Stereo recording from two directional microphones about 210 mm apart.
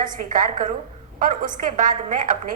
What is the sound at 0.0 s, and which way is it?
A woman's voice, 40° right (ahead or behind).